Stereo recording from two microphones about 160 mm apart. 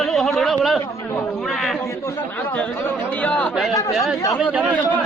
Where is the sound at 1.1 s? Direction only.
Centre (ahead or behind).